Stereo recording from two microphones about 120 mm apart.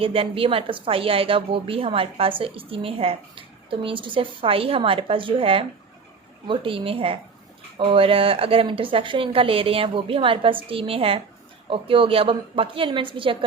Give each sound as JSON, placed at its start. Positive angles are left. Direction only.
{"t": 0.0, "sound": "a woman's voice", "side_deg": -50}